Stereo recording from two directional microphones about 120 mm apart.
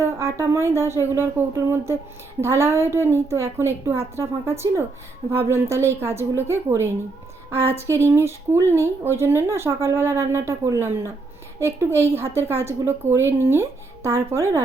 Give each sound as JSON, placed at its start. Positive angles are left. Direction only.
{"t": 0.0, "sound": "a woman's voice", "side_deg": -25}